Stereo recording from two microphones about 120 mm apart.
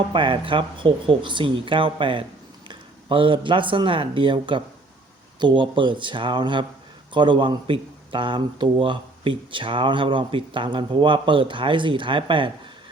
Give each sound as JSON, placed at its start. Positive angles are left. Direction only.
{"t": 0.1, "sound": "speech", "side_deg": -45}